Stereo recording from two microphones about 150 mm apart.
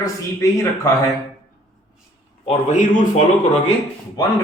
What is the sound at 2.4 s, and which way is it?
Speech, 50° left (ahead or behind).